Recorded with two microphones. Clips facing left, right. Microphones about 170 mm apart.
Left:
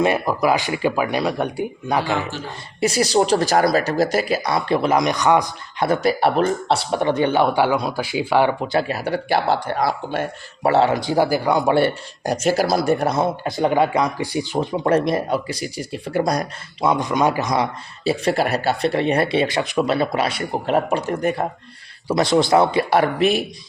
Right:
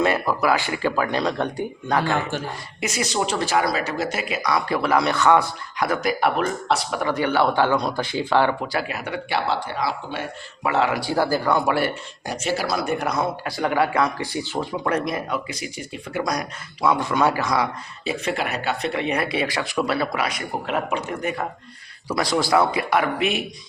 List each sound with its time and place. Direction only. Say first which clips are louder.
0.0 s speech: left 2 dB; 15° left (ahead or behind)
2.8 s a man's voice: left 7 dB; 35° left (ahead or behind); by 5.5 s 15° left (ahead or behind)
5.8 s a man's voice: left 4 dB; 30° left (ahead or behind); by 10.7 s 45° left (ahead or behind)
10.7 s a man's voice: left 5 dB; 30° left (ahead or behind); by 11.7 s 15° left (ahead or behind)
12.2 s a man's voice: left 7 dB; 40° left (ahead or behind)
16.9 s a man's voice: left 2 dB; 15° left (ahead or behind)
18.0 s a man's voice: left 6 dB; 35° left (ahead or behind)
22.0 s a man's voice: left 5 dB; 25° left (ahead or behind)